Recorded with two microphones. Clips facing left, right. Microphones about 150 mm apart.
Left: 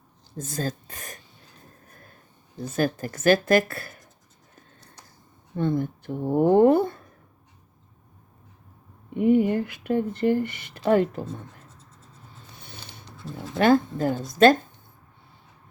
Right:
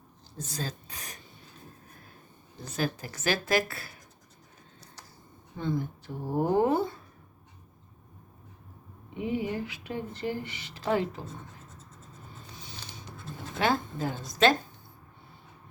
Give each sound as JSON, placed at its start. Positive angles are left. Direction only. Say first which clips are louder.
{"t": 0.3, "sound": "speech", "louder": "left 7 dB", "side_deg": 50}
{"t": 2.6, "sound": "speech", "louder": "left 7 dB", "side_deg": 50}
{"t": 5.5, "sound": "speech", "louder": "left 6 dB", "side_deg": 55}
{"t": 9.1, "sound": "speech", "louder": "left 11 dB", "side_deg": 55}
{"t": 12.5, "sound": "a sound", "louder": "left 2 dB", "side_deg": 55}
{"t": 13.2, "sound": "speech", "louder": "left 8 dB", "side_deg": 45}